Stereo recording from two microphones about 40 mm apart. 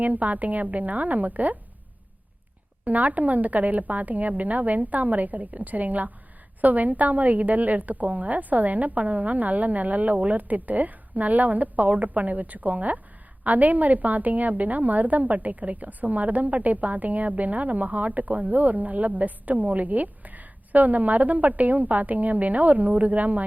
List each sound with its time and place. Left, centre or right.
0.0 s a woman's voice: right
2.8 s a woman's voice: right